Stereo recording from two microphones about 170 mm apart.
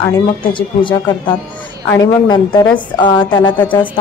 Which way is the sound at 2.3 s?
25° left (ahead or behind).